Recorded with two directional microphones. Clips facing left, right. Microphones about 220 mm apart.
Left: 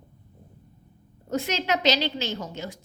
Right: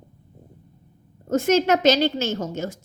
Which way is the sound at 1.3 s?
45° right (ahead or behind).